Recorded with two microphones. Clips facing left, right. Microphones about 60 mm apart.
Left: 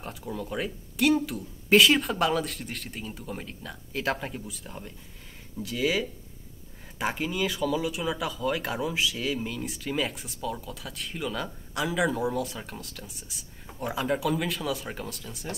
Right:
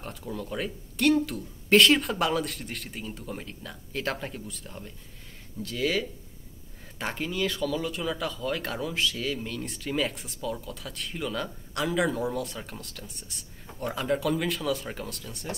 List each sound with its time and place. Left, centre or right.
0.0 s speech: centre